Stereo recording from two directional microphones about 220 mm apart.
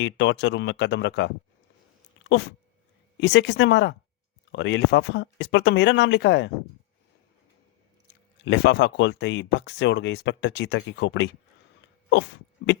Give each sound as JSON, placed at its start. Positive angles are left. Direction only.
{"t": 0.0, "sound": "speech", "side_deg": 55}
{"t": 3.2, "sound": "speech", "side_deg": 50}
{"t": 8.4, "sound": "speech", "side_deg": 55}